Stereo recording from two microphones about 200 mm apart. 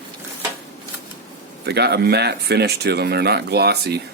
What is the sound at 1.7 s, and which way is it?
Speech, 55° right (ahead or behind).